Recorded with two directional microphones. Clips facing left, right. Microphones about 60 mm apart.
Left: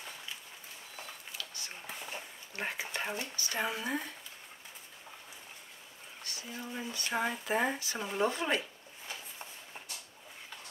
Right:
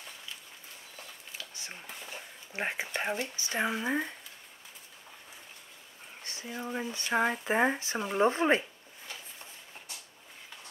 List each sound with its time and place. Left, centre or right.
1.4 s a sound: right
2.5 s speech: right
6.2 s speech: right